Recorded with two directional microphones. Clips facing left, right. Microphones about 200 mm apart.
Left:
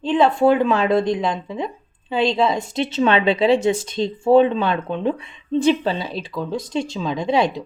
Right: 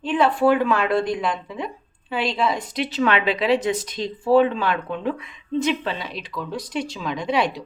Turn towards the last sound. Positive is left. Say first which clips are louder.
# left 3 dB
turn(degrees=25)  # may be behind; listen again after turning